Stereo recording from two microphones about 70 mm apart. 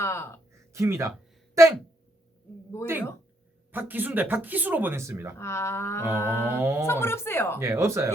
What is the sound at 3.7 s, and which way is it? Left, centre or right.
Speech, right.